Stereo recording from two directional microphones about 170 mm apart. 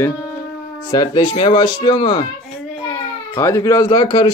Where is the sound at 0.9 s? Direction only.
25° left (ahead or behind).